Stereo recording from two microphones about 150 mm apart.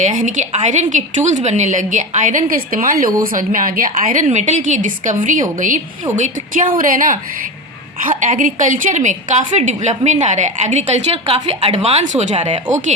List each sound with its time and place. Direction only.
0.0 s a woman's voice: 55° right (ahead or behind)